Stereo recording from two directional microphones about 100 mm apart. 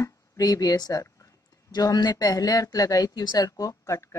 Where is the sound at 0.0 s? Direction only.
40° left (ahead or behind).